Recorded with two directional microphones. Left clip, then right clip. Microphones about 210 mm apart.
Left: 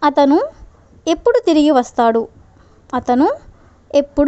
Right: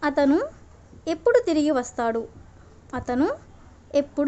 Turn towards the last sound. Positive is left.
turn(degrees=30)  # may be behind; listen again after turning